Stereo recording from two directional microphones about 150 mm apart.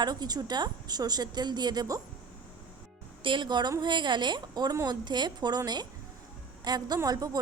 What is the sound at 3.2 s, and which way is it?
A woman's voice, 35° right (ahead or behind).